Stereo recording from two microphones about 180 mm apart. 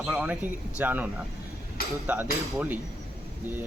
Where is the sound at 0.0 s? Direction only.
5° right (ahead or behind).